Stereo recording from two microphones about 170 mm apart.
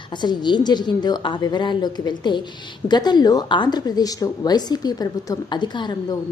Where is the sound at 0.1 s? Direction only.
25° left (ahead or behind).